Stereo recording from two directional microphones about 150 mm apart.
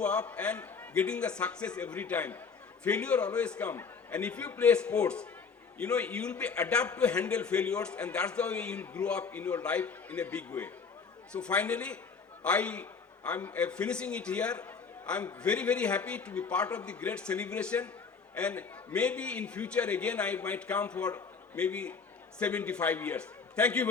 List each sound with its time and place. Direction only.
0.0 s a man's voice: 5° left (ahead or behind)